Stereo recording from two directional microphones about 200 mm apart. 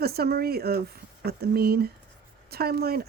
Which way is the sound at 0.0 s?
50° right (ahead or behind).